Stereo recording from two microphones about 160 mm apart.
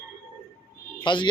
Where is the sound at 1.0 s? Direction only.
30° left (ahead or behind).